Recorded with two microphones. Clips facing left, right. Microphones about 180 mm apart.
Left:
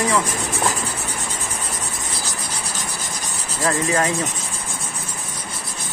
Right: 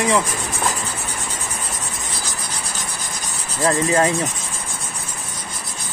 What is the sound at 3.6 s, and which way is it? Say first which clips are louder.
Speech: right 3 dB; 35° right (ahead or behind).